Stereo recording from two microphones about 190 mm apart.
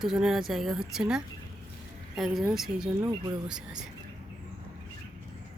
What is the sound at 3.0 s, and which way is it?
Speech, 20° right (ahead or behind).